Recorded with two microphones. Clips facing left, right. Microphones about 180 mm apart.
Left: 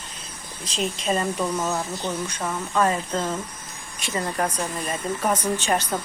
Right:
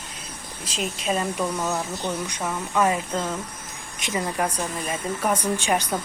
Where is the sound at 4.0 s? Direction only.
15° right (ahead or behind).